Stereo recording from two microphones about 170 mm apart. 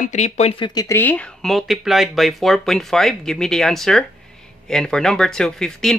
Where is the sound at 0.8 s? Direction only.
15° left (ahead or behind).